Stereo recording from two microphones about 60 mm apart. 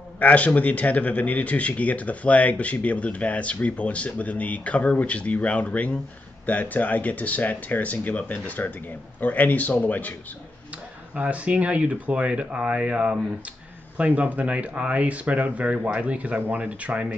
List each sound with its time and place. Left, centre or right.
0.2 s speech: left
11.1 s speech: right